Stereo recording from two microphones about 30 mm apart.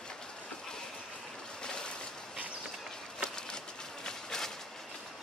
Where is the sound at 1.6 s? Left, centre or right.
Left.